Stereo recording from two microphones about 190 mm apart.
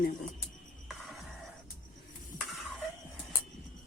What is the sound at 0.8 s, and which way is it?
Music, centre (ahead or behind).